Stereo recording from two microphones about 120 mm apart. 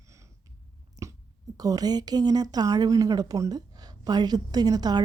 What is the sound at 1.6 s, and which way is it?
A woman's voice, 30° right (ahead or behind).